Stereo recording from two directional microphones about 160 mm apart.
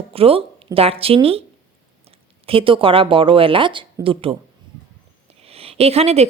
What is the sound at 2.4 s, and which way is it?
A woman's voice, 35° right (ahead or behind).